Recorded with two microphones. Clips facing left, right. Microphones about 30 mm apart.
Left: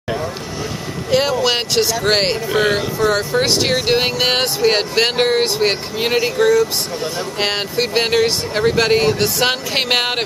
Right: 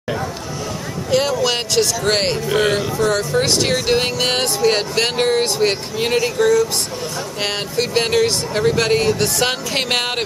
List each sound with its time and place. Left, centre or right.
1.3 s speech: centre